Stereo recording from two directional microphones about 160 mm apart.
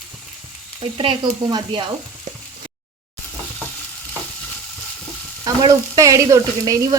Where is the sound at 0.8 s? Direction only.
35° right (ahead or behind).